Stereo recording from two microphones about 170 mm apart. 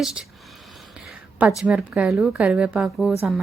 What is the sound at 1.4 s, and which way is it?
Speech, 5° right (ahead or behind).